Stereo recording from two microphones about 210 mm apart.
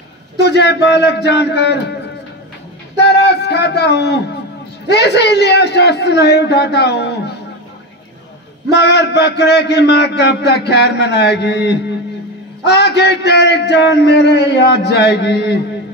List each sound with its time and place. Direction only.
0.4 s a man's voice: 55° left (ahead or behind)
3.0 s a sound: 50° left (ahead or behind)
4.8 s a man's voice: 50° left (ahead or behind)
8.7 s a man's voice: 50° left (ahead or behind)